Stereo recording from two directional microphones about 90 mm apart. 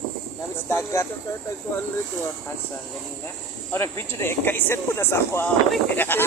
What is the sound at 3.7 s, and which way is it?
Speech, 25° left (ahead or behind).